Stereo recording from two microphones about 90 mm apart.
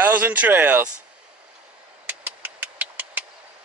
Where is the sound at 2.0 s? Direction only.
20° right (ahead or behind).